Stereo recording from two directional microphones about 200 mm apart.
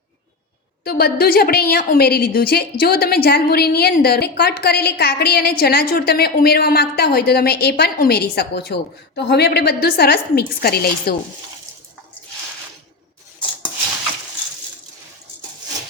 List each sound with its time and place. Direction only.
0.9 s a woman's voice: 50° left (ahead or behind)